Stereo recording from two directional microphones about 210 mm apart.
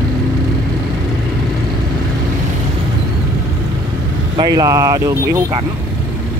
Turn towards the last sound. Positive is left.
turn(degrees=-15)  # may be behind; listen again after turning